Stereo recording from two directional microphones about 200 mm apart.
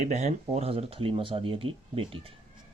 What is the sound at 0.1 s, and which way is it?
Speech, 35° right (ahead or behind).